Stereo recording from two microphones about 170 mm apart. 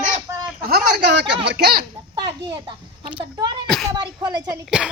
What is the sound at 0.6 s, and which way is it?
Speech, 75° right (ahead or behind).